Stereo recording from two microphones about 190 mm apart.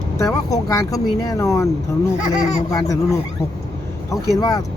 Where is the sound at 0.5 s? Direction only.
15° left (ahead or behind).